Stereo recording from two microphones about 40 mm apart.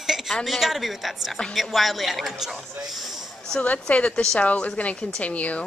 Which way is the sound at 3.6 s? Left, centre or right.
Left.